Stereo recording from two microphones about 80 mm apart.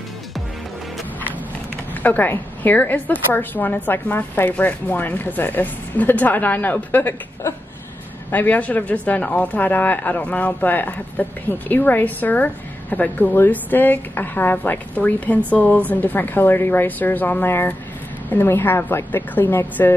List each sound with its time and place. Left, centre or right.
2.0 s a woman's voice: left
8.3 s a woman's voice: left